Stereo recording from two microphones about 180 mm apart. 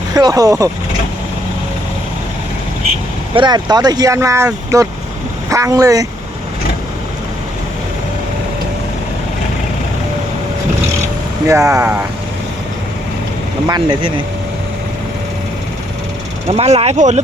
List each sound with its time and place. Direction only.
0.1 s speech: 20° right (ahead or behind)
3.3 s speech: 25° right (ahead or behind)
11.4 s speech: 15° right (ahead or behind)
13.7 s speech: 25° right (ahead or behind)
16.5 s speech: 35° right (ahead or behind)